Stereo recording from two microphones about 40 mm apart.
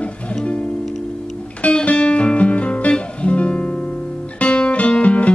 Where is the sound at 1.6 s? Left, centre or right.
Left.